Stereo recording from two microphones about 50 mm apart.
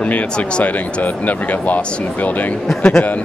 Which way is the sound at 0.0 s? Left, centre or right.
Left.